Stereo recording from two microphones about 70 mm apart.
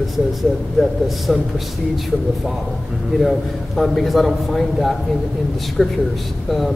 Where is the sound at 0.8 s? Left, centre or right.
Centre.